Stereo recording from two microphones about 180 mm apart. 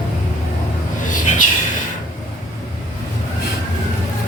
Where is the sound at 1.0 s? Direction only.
45° left (ahead or behind).